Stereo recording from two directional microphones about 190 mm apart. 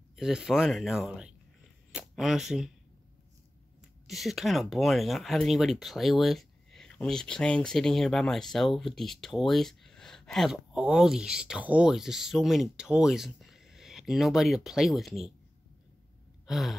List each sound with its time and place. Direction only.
0.1 s speech: 5° right (ahead or behind)
4.1 s speech: centre (ahead or behind)
16.4 s gasp: centre (ahead or behind)